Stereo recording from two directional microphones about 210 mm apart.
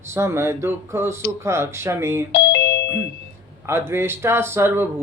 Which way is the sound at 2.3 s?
50° left (ahead or behind).